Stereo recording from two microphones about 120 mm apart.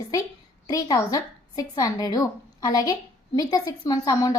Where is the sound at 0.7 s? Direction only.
30° left (ahead or behind).